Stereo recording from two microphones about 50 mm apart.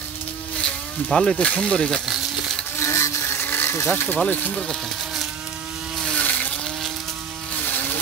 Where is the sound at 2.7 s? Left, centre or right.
Left.